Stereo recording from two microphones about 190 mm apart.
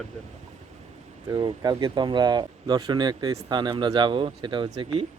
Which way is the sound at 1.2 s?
20° right (ahead or behind).